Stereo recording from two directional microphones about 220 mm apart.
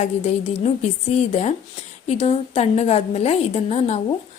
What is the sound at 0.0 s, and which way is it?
A woman's voice, 30° left (ahead or behind).